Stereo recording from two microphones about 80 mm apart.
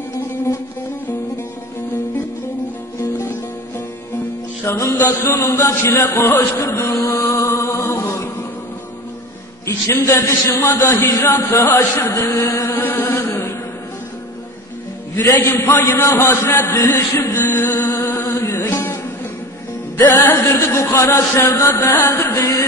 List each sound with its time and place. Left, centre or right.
4.6 s a man's voice: left
5.5 s a sound: left
5.9 s music: left
9.7 s a man's voice: left
10.8 s a sound: left
11.2 s a man's voice: left
12.5 s chant: left
15.4 s a man's voice: left
17.4 s music: left
20.2 s a man's voice: left
21.7 s a man's voice: left